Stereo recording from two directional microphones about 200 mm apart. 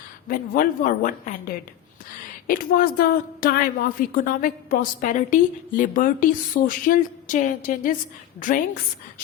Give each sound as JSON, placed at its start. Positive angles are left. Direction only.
{"t": 0.3, "sound": "a woman's voice", "side_deg": 45}